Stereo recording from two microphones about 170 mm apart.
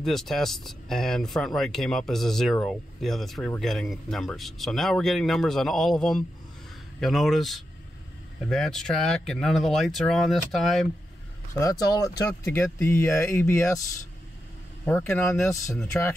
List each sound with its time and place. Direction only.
0.0 s speech: centre (ahead or behind)
11.5 s speech: 20° left (ahead or behind)
14.9 s speech: 10° left (ahead or behind)